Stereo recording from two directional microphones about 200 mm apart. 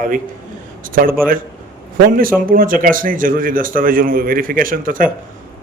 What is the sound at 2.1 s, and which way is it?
A man's voice, 45° right (ahead or behind).